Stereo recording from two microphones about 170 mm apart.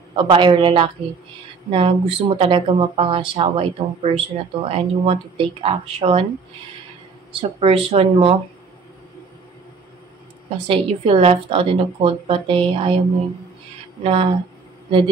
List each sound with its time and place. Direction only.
0.1 s a man's voice: 30° right (ahead or behind)
7.3 s speech: 35° right (ahead or behind)
10.7 s speech: 35° right (ahead or behind)
14.0 s speech: 35° right (ahead or behind)